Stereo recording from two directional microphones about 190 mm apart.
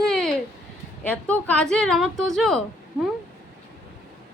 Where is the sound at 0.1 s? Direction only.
Centre (ahead or behind).